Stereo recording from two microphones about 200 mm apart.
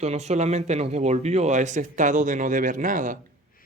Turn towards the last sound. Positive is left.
turn(degrees=-40)  # may be behind; listen again after turning